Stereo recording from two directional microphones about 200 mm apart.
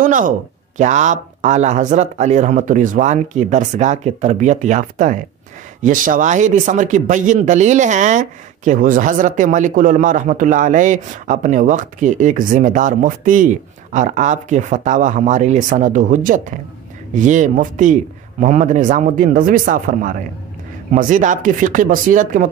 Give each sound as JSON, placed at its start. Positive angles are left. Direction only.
{"t": 0.0, "sound": "a man's voice", "side_deg": -40}